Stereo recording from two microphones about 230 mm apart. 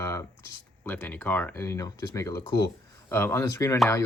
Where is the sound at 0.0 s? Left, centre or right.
Centre.